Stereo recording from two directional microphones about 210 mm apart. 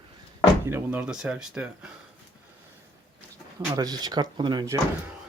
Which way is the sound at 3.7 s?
20° right (ahead or behind).